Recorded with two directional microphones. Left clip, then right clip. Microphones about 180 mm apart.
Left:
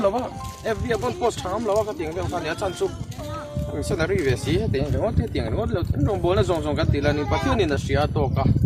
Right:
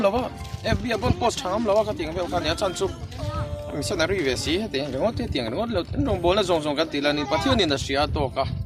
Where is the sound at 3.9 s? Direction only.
15° right (ahead or behind).